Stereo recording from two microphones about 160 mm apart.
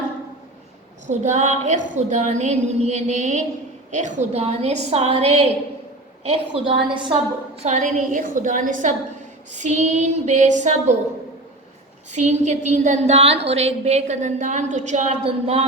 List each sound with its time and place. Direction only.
1.0 s a woman's voice: 45° right (ahead or behind); by 7.1 s 30° right (ahead or behind)
7.6 s a woman's voice: 45° right (ahead or behind)
12.1 s a woman's voice: 45° right (ahead or behind)